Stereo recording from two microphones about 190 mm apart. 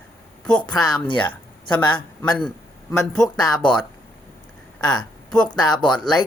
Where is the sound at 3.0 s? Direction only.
Centre (ahead or behind).